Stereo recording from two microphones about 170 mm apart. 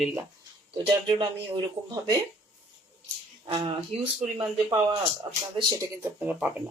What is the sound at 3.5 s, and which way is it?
Speech, 35° right (ahead or behind).